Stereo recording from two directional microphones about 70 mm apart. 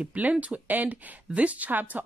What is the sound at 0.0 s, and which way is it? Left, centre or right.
Speech, right.